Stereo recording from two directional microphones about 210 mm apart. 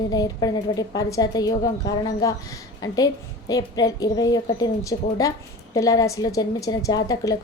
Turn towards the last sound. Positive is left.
turn(degrees=15)  # may be behind; listen again after turning